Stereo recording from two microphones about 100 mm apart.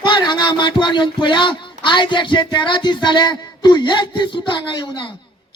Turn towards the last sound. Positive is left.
turn(degrees=50)  # may be behind; listen again after turning